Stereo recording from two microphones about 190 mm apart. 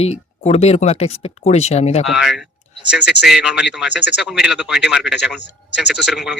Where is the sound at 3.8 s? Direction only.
65° left (ahead or behind).